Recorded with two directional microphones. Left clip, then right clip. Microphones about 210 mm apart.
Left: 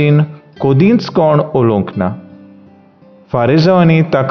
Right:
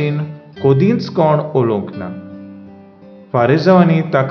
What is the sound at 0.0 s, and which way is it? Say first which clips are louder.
Speech: left 7 dB; 40° left (ahead or behind).